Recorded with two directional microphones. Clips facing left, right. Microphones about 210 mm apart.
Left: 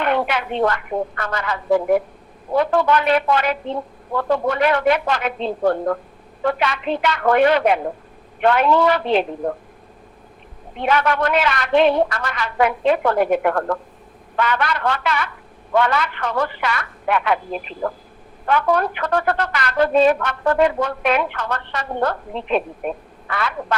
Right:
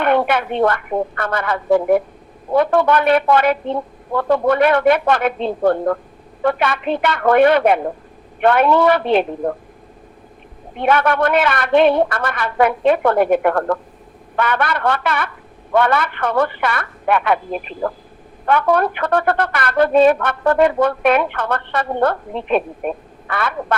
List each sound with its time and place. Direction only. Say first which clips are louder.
0.0 s a woman's voice: right 4 dB; 55° right (ahead or behind)
10.8 s a woman's voice: right 3 dB; 55° right (ahead or behind)